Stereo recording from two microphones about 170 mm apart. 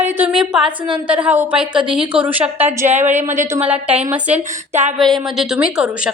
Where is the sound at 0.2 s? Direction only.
5° right (ahead or behind).